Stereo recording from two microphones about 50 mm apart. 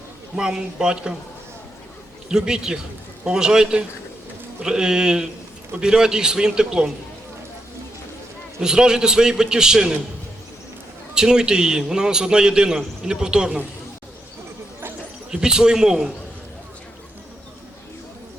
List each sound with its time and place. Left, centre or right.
0.3 s a man's voice: centre
2.3 s a man's voice: centre
8.6 s a man's voice: centre
11.1 s a man's voice: centre
15.3 s a man's voice: centre